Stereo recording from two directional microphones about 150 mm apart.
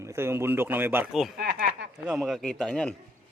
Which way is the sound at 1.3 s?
90° right.